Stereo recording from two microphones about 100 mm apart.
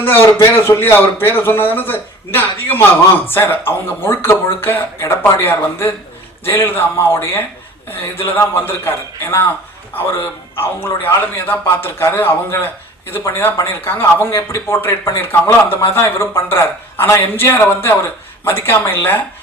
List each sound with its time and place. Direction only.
0.0 s a man's voice: 20° left (ahead or behind)